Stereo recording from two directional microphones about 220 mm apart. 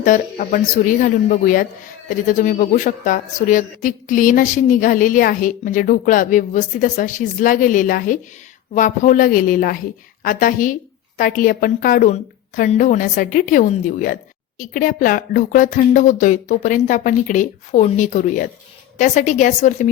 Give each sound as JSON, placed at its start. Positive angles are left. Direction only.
{"t": 0.0, "sound": "speech", "side_deg": 35}